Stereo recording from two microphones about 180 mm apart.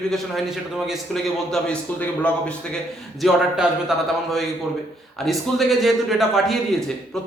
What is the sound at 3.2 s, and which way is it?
Speech, centre (ahead or behind).